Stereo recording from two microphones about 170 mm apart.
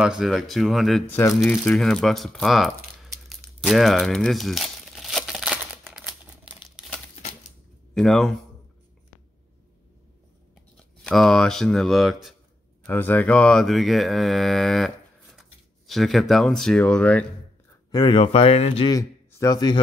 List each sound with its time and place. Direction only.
0.0 s speech: 5° right (ahead or behind)
1.0 s speech: 10° left (ahead or behind)
3.3 s crumpling: centre (ahead or behind)
7.9 s speech: centre (ahead or behind)
11.1 s speech: centre (ahead or behind)
12.8 s speech: 10° left (ahead or behind)
17.9 s speech: 30° left (ahead or behind)
18.9 s speech: 20° left (ahead or behind)